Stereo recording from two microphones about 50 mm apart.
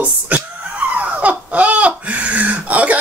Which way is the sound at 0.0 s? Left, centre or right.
Right.